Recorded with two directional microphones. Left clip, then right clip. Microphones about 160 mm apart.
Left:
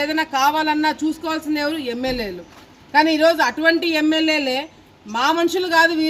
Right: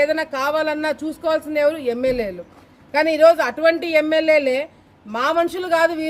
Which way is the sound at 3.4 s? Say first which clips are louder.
Left 1 dB; 20° right (ahead or behind).